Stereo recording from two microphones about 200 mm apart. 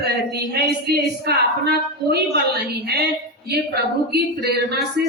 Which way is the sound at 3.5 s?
55° right (ahead or behind).